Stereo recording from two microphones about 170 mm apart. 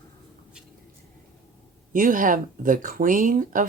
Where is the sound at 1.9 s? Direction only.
55° right (ahead or behind).